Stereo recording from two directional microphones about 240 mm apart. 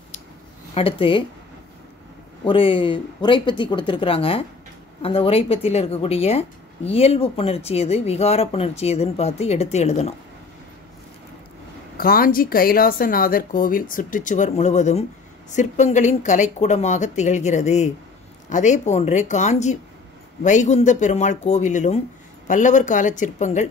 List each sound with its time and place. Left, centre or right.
0.7 s speech: left
2.4 s speech: left
12.0 s speech: left